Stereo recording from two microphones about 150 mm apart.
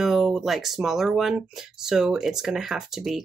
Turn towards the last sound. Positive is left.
turn(degrees=0)  # may be behind; listen again after turning